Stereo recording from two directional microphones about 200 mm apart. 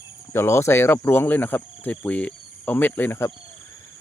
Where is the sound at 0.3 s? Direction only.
10° left (ahead or behind).